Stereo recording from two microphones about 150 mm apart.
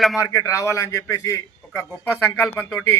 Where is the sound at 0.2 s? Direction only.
20° left (ahead or behind).